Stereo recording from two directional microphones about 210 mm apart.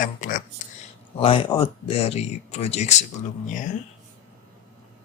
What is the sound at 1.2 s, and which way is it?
Speech, 25° left (ahead or behind).